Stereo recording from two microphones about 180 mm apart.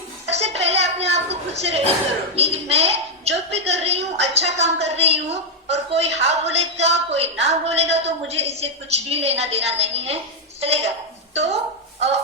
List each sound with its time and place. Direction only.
0.3 s a sound: 35° right (ahead or behind)
2.3 s a woman's voice: 35° right (ahead or behind)
11.3 s a woman's voice: 35° right (ahead or behind)